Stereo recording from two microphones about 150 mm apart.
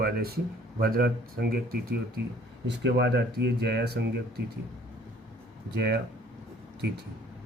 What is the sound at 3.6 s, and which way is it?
Speech, 90° right.